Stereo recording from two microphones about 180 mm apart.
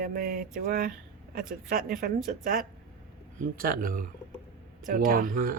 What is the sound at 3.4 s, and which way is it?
Speech, 55° right (ahead or behind).